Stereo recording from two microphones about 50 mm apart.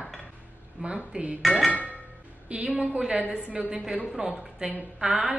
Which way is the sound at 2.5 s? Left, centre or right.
Right.